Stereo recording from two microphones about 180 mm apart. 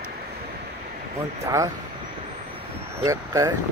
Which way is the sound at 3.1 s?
20° right (ahead or behind).